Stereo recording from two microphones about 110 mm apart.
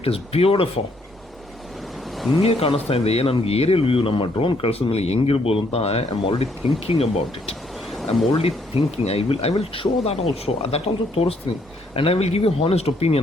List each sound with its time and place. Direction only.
0.0 s speech: 60° left (ahead or behind)
2.4 s speech: 60° left (ahead or behind)
7.9 s a sound: centre (ahead or behind)
8.4 s speech: 65° left (ahead or behind)